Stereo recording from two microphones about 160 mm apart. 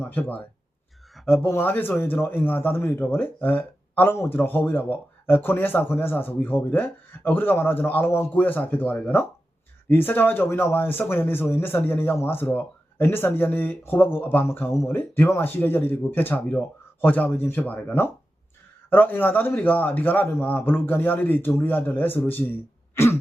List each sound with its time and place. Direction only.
0.0 s a man's voice: 10° left (ahead or behind)
23.0 s throat clearing: 15° left (ahead or behind)